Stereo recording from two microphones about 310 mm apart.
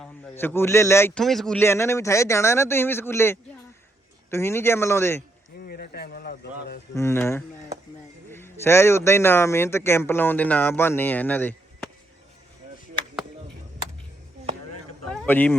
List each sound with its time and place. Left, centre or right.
0.0 s a man's voice: centre
5.6 s a sound: left
6.9 s a man's voice: centre
15.1 s insect: centre